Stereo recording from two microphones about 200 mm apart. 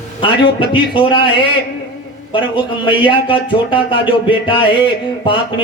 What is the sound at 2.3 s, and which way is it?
Speech, 25° left (ahead or behind).